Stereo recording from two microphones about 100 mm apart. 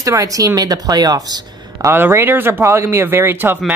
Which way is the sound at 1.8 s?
25° right (ahead or behind).